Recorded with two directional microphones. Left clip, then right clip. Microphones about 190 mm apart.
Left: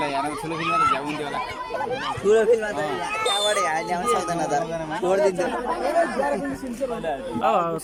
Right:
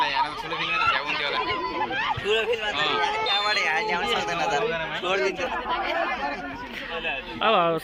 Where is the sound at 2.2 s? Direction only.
55° left (ahead or behind).